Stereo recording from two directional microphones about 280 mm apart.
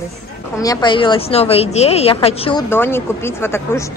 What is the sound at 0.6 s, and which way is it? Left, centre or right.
A woman's voice, centre.